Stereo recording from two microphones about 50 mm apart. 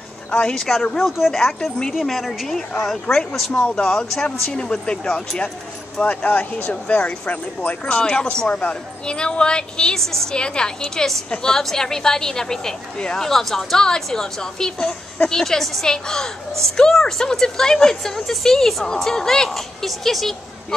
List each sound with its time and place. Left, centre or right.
0.3 s speech: centre
0.6 s a woman's voice: centre
3.5 s speech: left
3.9 s a woman's voice: centre
5.9 s a woman's voice: left; by 20.3 s centre